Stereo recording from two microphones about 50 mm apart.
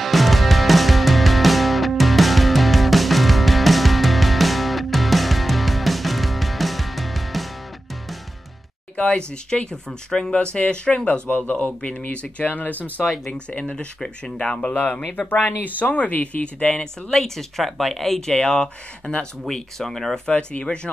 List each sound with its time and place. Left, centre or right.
0.0 s music: centre
8.9 s speech: left
13.0 s speech: centre
13.3 s speech: left
13.9 s speech: centre
14.4 s speech: left
16.8 s speech: centre
19.4 s speech: centre
20.2 s speech: left